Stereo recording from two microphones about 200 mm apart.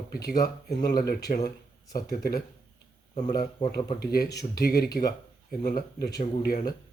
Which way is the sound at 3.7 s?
50° left (ahead or behind).